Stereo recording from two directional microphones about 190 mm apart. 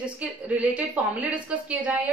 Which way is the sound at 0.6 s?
5° right (ahead or behind).